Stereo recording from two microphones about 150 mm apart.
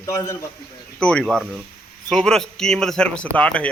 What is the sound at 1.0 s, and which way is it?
Speech, 5° left (ahead or behind).